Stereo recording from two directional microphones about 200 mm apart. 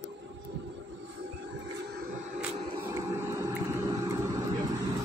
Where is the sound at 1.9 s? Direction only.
40° right (ahead or behind).